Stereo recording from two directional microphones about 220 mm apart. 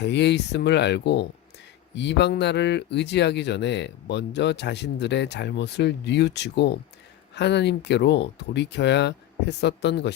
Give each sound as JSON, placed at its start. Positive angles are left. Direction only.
{"t": 0.0, "sound": "speech", "side_deg": 50}